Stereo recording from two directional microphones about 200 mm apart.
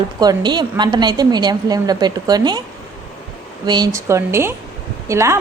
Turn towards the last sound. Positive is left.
turn(degrees=-15)  # may be behind; listen again after turning